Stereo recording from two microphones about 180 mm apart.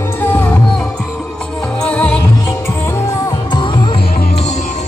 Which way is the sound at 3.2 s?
25° left (ahead or behind).